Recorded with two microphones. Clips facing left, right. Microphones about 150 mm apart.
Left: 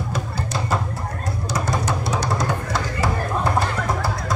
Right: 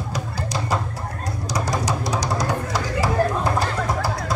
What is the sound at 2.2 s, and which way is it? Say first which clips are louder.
Music: even; 10° right (ahead or behind).